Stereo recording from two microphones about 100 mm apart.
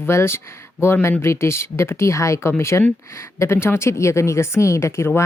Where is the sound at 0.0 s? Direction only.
25° left (ahead or behind).